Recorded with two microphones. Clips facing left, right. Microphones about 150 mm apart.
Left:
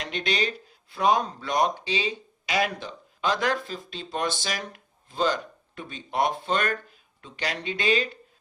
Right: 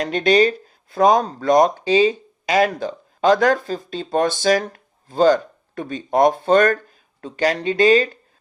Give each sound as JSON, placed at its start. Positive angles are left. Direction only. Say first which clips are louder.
{"t": 0.0, "sound": "speech", "louder": "right 12 dB", "side_deg": -45}